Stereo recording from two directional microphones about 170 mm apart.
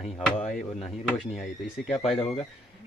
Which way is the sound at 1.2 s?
Centre (ahead or behind).